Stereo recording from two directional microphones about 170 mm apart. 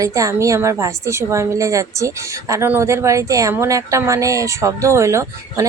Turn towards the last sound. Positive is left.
turn(degrees=-20)  # may be behind; listen again after turning